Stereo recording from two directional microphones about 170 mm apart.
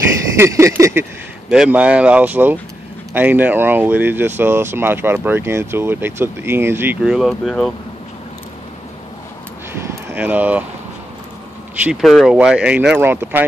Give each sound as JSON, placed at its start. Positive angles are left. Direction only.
{"t": 0.4, "sound": "speech", "side_deg": -15}
{"t": 1.5, "sound": "speech", "side_deg": -5}
{"t": 9.8, "sound": "a sound", "side_deg": -15}
{"t": 11.8, "sound": "speech", "side_deg": 0}